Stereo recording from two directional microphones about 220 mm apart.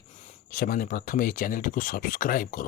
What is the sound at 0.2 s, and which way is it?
Speech, 35° left (ahead or behind).